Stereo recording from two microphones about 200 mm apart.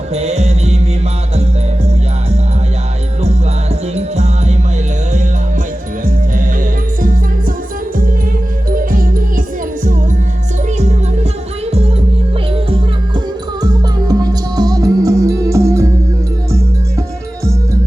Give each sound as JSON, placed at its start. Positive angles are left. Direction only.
{"t": 0.1, "sound": "music", "side_deg": -35}
{"t": 3.2, "sound": "music", "side_deg": -30}
{"t": 7.0, "sound": "music", "side_deg": -45}
{"t": 8.7, "sound": "music", "side_deg": -45}
{"t": 10.8, "sound": "music", "side_deg": -35}
{"t": 12.7, "sound": "music", "side_deg": -20}